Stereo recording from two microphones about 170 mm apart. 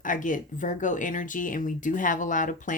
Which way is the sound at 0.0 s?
50° left (ahead or behind).